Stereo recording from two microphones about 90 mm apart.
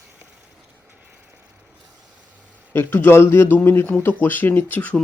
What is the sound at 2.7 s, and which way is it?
Speech, 25° left (ahead or behind).